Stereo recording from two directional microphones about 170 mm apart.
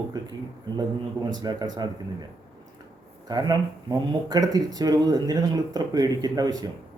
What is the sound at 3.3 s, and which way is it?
Speech, 25° right (ahead or behind).